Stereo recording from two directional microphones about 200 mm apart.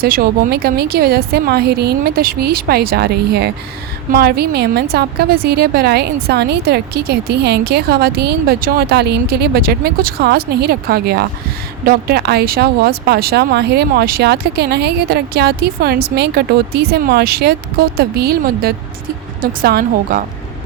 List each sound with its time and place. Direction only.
0.0 s a woman's voice: 50° right (ahead or behind)